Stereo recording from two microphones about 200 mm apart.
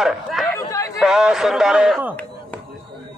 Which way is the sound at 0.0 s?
Centre (ahead or behind).